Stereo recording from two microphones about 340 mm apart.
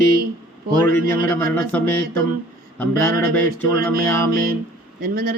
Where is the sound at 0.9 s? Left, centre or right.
Centre.